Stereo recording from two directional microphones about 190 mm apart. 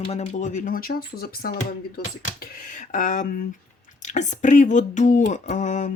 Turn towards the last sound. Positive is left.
turn(degrees=40)  # may be behind; listen again after turning